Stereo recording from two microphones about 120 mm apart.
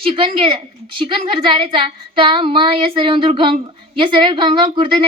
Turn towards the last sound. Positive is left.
turn(degrees=-45)  # may be behind; listen again after turning